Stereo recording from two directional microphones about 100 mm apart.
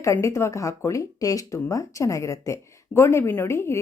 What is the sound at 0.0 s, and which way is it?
Speech, 30° left (ahead or behind).